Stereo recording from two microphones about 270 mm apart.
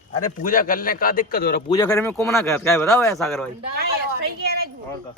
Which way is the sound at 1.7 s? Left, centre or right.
Centre.